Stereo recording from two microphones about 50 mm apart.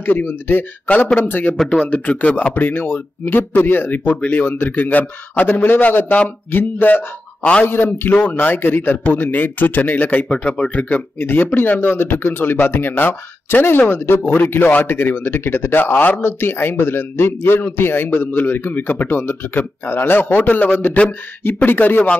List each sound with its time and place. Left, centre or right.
0.0 s speech: left
0.8 s speech: left
1.6 s speech: centre
1.9 s speech: left
2.6 s speech: left
10.3 s speech: centre
10.7 s speech: left
11.1 s speech: left